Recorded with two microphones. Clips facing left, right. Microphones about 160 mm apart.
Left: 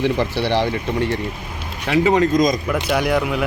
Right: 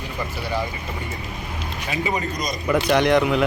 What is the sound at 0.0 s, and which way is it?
Speech, 90° left.